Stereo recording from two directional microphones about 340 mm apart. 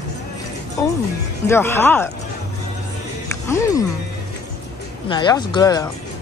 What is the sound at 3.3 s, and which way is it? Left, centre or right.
Speech, centre.